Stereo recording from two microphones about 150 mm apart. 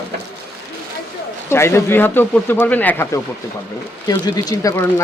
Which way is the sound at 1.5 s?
15° left (ahead or behind).